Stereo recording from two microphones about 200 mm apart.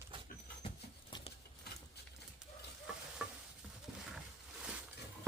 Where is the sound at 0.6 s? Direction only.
25° left (ahead or behind).